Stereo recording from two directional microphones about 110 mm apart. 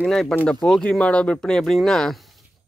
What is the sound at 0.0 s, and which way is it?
Speech, 5° left (ahead or behind).